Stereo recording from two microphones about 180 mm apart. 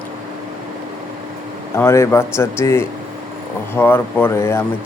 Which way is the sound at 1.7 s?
15° left (ahead or behind).